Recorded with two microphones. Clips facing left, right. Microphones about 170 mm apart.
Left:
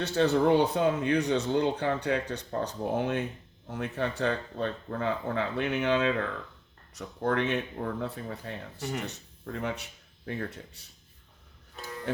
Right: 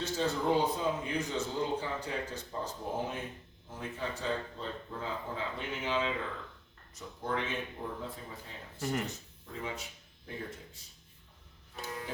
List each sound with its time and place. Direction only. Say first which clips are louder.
0.0 s speech: left 8 dB; 70° left (ahead or behind)
12.1 s speech: left 11 dB; 70° left (ahead or behind)